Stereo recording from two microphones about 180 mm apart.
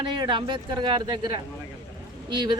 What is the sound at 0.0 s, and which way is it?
Speech, 25° right (ahead or behind).